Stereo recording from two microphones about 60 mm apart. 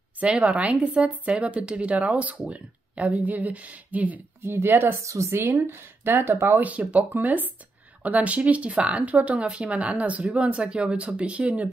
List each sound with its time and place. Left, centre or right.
0.2 s speech: right
4.4 s speech: right
4.9 s speech: right
5.3 s speech: right
6.6 s speech: right